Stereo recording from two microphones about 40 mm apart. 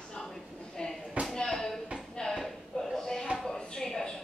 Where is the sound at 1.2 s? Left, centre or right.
Right.